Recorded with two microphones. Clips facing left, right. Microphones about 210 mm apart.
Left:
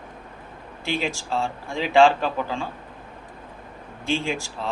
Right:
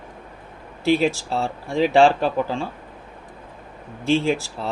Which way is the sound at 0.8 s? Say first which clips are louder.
Right 8 dB; 40° right (ahead or behind).